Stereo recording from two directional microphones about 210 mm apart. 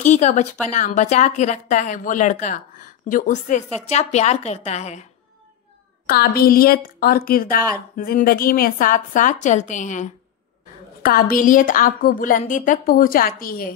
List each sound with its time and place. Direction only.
0.0 s a woman's voice: 35° left (ahead or behind)
6.0 s a woman's voice: 45° left (ahead or behind)
11.1 s a woman's voice: 45° left (ahead or behind)